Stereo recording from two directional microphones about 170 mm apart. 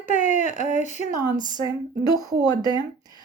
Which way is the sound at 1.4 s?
25° right (ahead or behind).